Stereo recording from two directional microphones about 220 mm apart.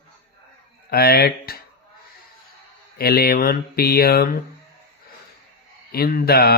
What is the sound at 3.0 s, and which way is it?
Speech, 45° left (ahead or behind).